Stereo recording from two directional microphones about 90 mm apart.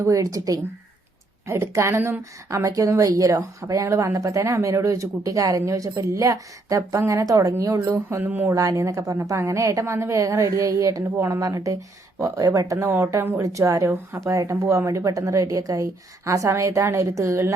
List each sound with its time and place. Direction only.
0.0 s speech: 40° right (ahead or behind)
1.5 s speech: 30° right (ahead or behind)
8.2 s speech: 20° right (ahead or behind)
8.4 s speech: 35° right (ahead or behind)
13.4 s speech: 35° right (ahead or behind)